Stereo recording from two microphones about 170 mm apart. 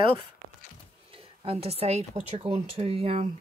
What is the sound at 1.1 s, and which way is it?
Speech, 35° right (ahead or behind).